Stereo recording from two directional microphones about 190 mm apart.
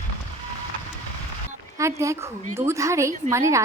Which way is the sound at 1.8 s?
15° right (ahead or behind).